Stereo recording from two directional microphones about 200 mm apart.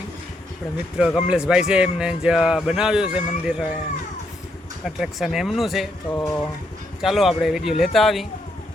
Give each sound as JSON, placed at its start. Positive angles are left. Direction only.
{"t": 0.9, "sound": "a man's voice", "side_deg": -5}
{"t": 4.9, "sound": "a man's voice", "side_deg": 0}
{"t": 6.1, "sound": "a sound", "side_deg": 15}
{"t": 7.0, "sound": "a man's voice", "side_deg": 0}